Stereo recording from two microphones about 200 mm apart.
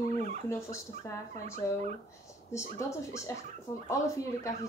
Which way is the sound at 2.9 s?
15° left (ahead or behind).